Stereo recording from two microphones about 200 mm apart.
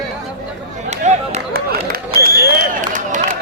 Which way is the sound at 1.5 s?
50° right (ahead or behind).